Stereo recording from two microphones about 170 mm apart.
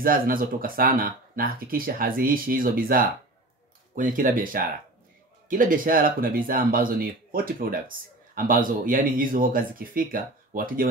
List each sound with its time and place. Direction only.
0.0 s speech: 55° right (ahead or behind)